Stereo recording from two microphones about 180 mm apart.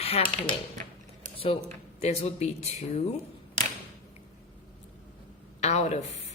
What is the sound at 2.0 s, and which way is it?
A woman's voice, 35° left (ahead or behind).